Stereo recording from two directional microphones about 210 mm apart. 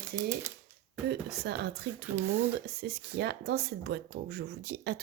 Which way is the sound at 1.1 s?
50° right (ahead or behind).